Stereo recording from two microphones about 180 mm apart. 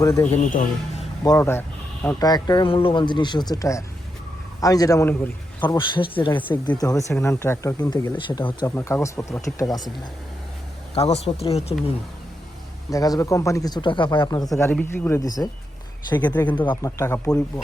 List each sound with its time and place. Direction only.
0.0 s speech: 15° left (ahead or behind)
0.3 s speech: 40° left (ahead or behind)
1.2 s speech: 15° left (ahead or behind)
2.1 s speech: 20° left (ahead or behind)
5.6 s speech: 25° left (ahead or behind)
10.9 s speech: 35° left (ahead or behind)
12.9 s speech: 20° left (ahead or behind)
14.5 s speech: 15° left (ahead or behind)